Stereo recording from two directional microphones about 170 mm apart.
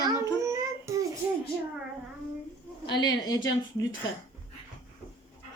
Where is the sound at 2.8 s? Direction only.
25° left (ahead or behind).